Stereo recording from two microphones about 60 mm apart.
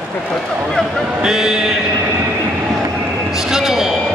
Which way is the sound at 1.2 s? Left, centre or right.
Centre.